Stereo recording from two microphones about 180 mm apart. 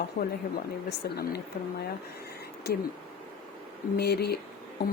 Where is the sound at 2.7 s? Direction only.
65° left (ahead or behind).